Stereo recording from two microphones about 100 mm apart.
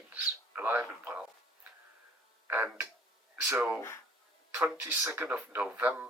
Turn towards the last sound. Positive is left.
turn(degrees=-15)  # may be behind; listen again after turning